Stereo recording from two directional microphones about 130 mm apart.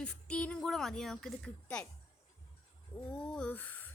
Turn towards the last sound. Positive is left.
turn(degrees=15)  # may be behind; listen again after turning